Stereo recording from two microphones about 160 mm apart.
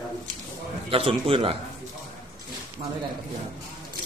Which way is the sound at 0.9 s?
35° right (ahead or behind).